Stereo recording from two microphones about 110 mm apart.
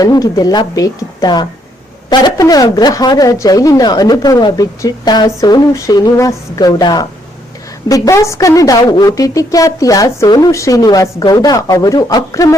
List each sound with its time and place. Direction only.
0.0 s a woman's voice: 35° left (ahead or behind)